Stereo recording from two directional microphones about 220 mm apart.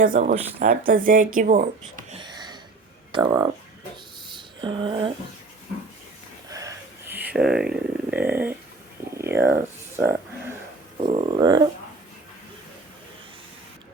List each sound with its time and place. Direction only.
0.0 s speech: 35° right (ahead or behind)
2.2 s a sound: 20° right (ahead or behind)
3.1 s speech: 20° right (ahead or behind)
4.6 s speech: 20° right (ahead or behind)
6.5 s a sound: 15° right (ahead or behind)
9.1 s speech: 10° right (ahead or behind)
11.0 s speech: 30° right (ahead or behind)